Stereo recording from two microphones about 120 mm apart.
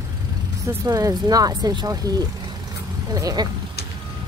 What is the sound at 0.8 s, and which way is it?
Speech, 30° right (ahead or behind).